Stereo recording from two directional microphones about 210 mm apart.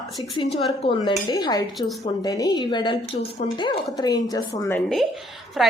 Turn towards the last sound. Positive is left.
turn(degrees=0)  # may be behind; listen again after turning